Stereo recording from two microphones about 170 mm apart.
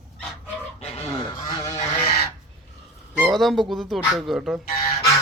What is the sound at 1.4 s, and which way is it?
Goose, 20° left (ahead or behind).